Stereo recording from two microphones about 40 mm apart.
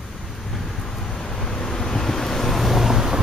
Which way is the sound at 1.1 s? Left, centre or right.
Centre.